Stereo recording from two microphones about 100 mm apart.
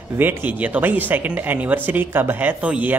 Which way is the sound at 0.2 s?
20° right (ahead or behind).